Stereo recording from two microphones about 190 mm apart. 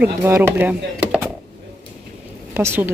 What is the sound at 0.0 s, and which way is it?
Speech, 10° right (ahead or behind).